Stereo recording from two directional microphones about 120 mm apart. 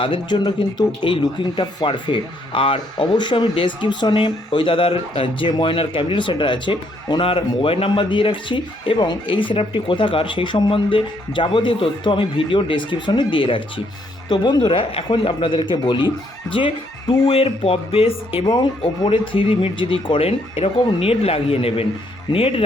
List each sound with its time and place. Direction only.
0.0 s speech: 40° left (ahead or behind)